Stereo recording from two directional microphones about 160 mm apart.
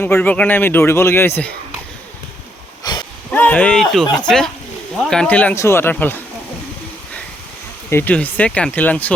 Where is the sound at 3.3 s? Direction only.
10° left (ahead or behind).